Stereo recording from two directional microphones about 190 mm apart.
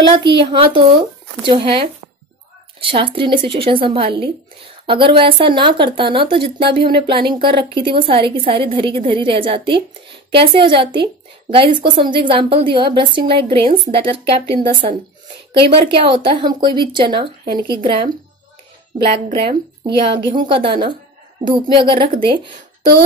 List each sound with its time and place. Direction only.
0.4 s a woman's voice: 25° right (ahead or behind)
19.2 s a woman's voice: 30° right (ahead or behind)